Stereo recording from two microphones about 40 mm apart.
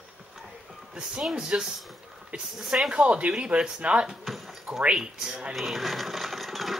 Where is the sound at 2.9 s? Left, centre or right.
Right.